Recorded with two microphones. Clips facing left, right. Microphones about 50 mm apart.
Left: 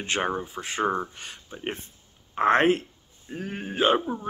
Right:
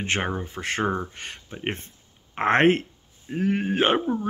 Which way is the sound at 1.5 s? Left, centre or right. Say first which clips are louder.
Right 2 dB; right.